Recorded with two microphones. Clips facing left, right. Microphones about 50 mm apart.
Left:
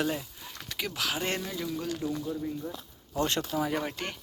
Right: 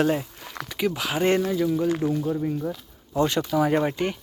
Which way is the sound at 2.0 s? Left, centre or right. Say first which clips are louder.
Right 8 dB; right.